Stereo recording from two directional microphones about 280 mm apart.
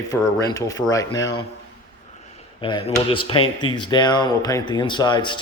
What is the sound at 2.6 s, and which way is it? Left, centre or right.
A man's voice, centre.